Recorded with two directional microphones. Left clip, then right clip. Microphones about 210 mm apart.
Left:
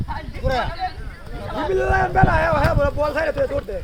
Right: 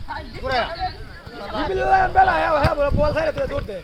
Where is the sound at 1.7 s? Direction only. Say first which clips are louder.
Right 2 dB; 50° left (ahead or behind).